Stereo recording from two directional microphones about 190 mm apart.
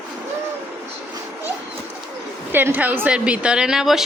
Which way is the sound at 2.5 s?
10° right (ahead or behind).